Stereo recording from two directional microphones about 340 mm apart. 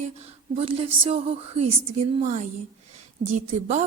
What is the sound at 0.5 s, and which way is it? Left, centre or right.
A woman's voice, centre.